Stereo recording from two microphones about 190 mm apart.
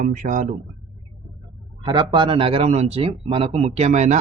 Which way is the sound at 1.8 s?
20° right (ahead or behind).